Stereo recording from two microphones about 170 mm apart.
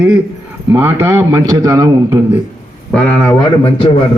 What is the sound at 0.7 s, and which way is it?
A man's voice, 15° right (ahead or behind).